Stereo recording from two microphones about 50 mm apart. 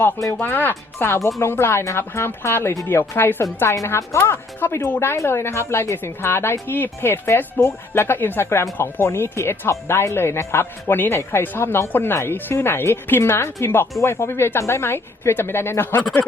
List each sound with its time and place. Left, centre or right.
0.3 s speech: left
1.8 s speech: left
2.8 s speech: left
4.1 s speech: left
4.6 s speech: left
6.0 s speech: left
8.4 s speech: left